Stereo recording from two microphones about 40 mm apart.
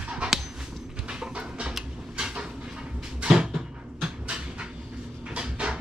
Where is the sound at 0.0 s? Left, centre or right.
Right.